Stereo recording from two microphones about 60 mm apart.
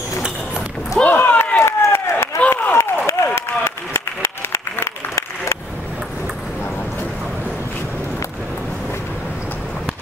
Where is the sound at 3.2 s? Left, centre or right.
Left.